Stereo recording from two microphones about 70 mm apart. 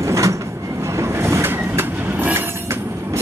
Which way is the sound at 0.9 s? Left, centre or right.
Right.